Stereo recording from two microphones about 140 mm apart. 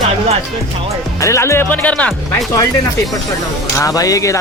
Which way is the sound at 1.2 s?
20° left (ahead or behind).